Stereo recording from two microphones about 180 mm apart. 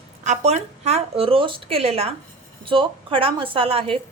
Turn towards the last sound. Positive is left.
turn(degrees=-30)  # may be behind; listen again after turning